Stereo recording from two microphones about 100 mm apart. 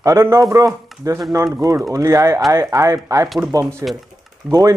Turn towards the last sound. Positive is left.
turn(degrees=-40)  # may be behind; listen again after turning